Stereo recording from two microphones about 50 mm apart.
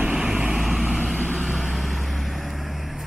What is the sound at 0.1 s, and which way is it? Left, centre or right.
Vehicle, centre.